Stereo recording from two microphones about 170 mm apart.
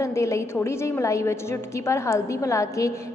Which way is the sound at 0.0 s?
15° left (ahead or behind).